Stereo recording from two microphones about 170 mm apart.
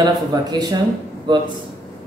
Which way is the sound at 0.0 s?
25° right (ahead or behind).